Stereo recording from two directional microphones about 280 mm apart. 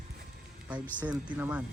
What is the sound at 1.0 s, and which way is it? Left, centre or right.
Speech, centre.